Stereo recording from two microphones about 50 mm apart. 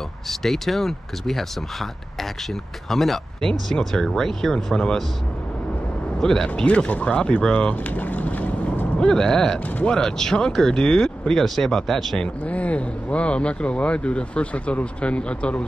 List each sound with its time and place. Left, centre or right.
0.3 s speech: centre
2.9 s speech: centre
6.2 s speech: centre
6.6 s speech: left
9.0 s speech: centre
12.4 s speech: left